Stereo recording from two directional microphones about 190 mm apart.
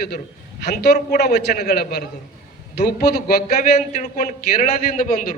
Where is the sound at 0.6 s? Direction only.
60° left (ahead or behind).